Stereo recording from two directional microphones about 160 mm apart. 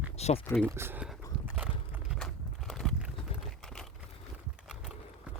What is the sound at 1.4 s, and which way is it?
Horse, 10° right (ahead or behind).